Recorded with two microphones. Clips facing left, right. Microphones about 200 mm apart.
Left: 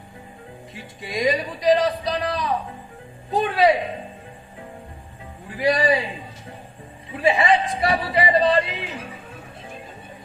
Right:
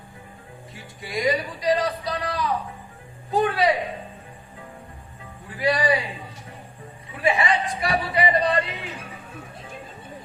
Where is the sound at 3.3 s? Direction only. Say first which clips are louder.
Left 2 dB; 25° left (ahead or behind).